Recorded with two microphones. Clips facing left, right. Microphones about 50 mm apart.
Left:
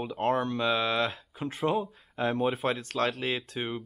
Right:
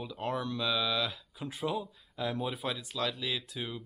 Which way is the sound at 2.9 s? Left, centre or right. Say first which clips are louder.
Left 5 dB; left.